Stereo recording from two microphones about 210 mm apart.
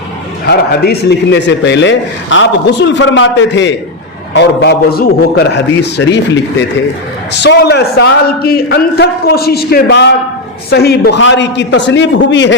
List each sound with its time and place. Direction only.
0.4 s a man's voice: 50° left (ahead or behind)